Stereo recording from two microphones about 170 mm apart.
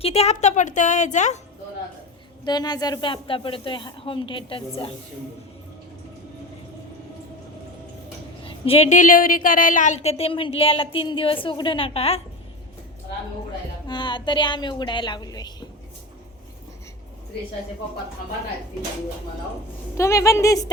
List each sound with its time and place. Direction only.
0.0 s a woman's voice: 35° left (ahead or behind)
2.4 s speech: 25° left (ahead or behind)
8.4 s a woman's voice: 35° left (ahead or behind)
13.8 s speech: 25° left (ahead or behind)
20.0 s a woman's voice: 15° left (ahead or behind)